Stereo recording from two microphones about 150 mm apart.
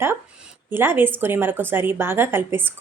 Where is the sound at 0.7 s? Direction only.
15° right (ahead or behind).